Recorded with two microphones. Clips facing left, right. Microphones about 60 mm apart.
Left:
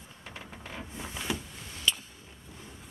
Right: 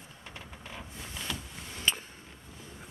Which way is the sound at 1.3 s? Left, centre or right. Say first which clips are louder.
Left 5 dB; centre.